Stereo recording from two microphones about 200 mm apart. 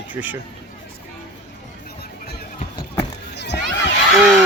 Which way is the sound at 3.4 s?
55° left (ahead or behind).